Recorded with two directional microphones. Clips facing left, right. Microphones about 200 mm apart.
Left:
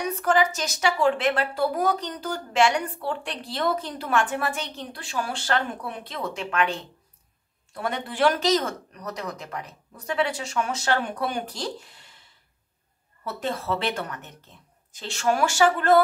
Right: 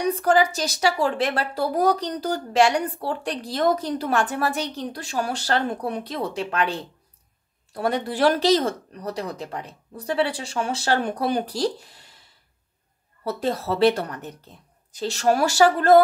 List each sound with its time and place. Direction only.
0.0 s a woman's voice: 35° right (ahead or behind)
13.2 s a woman's voice: 35° right (ahead or behind)